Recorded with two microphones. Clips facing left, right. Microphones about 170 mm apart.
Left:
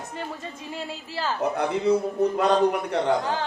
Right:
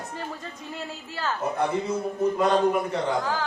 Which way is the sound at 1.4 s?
65° left (ahead or behind).